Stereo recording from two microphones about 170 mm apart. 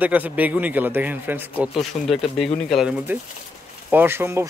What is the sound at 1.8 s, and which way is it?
Speech, centre (ahead or behind).